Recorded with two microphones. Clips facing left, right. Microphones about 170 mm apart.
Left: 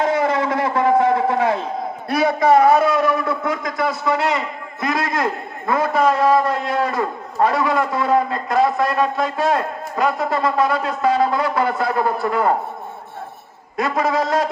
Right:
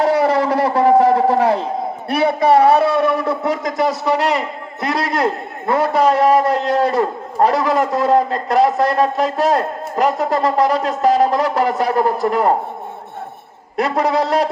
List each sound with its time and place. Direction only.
0.0 s a sound: 35° right (ahead or behind)
2.0 s a man's voice: 30° right (ahead or behind)
13.7 s a man's voice: 35° right (ahead or behind)